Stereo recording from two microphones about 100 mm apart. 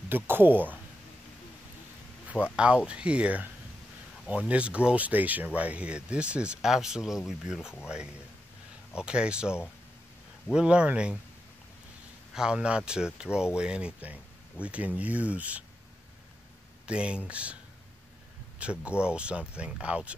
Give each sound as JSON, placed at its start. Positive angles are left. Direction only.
{"t": 0.1, "sound": "speech", "side_deg": -20}
{"t": 2.2, "sound": "speech", "side_deg": -10}
{"t": 12.4, "sound": "speech", "side_deg": -10}
{"t": 16.8, "sound": "speech", "side_deg": -10}
{"t": 18.9, "sound": "speech", "side_deg": -10}